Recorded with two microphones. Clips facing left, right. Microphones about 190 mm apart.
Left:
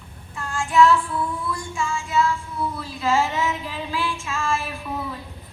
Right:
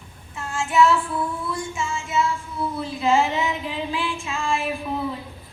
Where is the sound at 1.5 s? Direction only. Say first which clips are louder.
Even; 20° right (ahead or behind).